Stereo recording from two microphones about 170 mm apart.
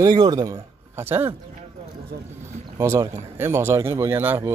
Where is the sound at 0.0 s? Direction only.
25° right (ahead or behind).